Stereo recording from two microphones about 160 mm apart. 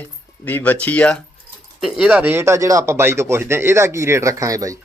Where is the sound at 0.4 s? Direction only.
10° left (ahead or behind).